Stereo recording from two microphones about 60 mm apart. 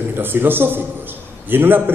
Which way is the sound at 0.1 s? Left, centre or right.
Right.